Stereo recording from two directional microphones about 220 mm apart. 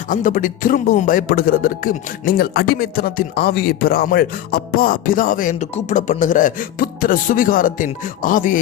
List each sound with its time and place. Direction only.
0.1 s speech: 35° left (ahead or behind)